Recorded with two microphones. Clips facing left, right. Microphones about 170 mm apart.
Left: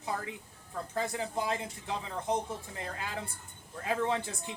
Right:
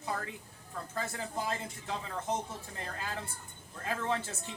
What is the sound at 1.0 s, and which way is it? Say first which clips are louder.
Speech: left 4 dB; 15° left (ahead or behind).